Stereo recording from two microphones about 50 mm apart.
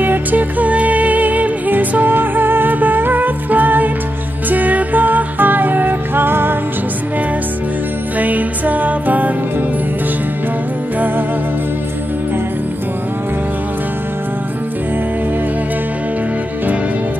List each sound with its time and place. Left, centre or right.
0.0 s music: right
8.2 s music: right